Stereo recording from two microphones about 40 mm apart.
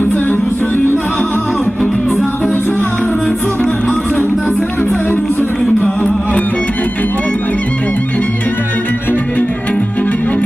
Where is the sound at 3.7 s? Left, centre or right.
Left.